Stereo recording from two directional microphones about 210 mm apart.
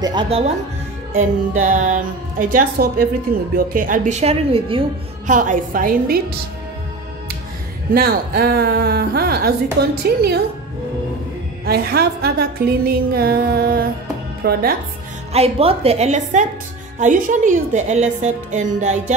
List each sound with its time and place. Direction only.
0.0 s a woman's voice: 20° right (ahead or behind)
1.1 s a woman's voice: 40° right (ahead or behind)
5.3 s a woman's voice: 40° right (ahead or behind)
7.9 s music: 45° right (ahead or behind)
11.6 s music: 50° right (ahead or behind)
15.3 s a woman's voice: 30° right (ahead or behind)